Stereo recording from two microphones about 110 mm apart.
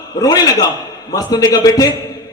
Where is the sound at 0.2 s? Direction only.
35° left (ahead or behind).